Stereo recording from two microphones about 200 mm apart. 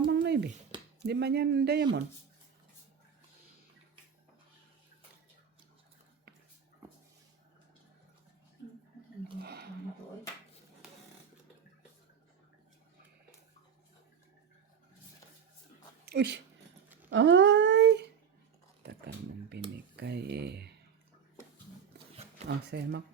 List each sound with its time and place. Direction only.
0.1 s a sound: 60° right (ahead or behind)
1.0 s speech: 55° right (ahead or behind)
9.4 s squish: 50° right (ahead or behind)
16.0 s speech: 60° right (ahead or behind)
17.1 s a sound: 65° right (ahead or behind)
22.4 s speech: 55° right (ahead or behind)